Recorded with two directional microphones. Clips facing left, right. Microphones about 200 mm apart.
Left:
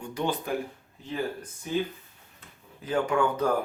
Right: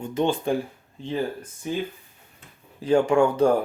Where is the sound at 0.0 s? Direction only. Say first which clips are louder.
Right 6 dB; 25° right (ahead or behind).